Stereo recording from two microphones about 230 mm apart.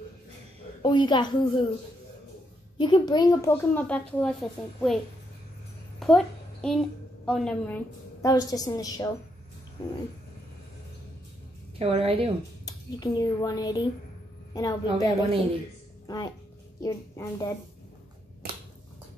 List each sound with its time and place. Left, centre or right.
0.8 s a woman's voice: centre
2.8 s a woman's voice: centre
5.9 s a woman's voice: centre
11.8 s a woman's voice: right
12.6 s a woman's voice: centre
16.8 s a woman's voice: centre